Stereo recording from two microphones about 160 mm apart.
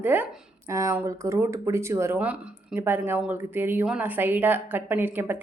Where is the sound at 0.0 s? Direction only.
15° right (ahead or behind).